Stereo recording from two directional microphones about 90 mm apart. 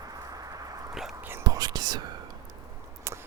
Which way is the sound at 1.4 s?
45° right (ahead or behind).